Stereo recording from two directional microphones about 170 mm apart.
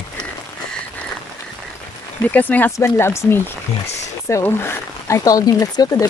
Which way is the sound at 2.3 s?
10° left (ahead or behind).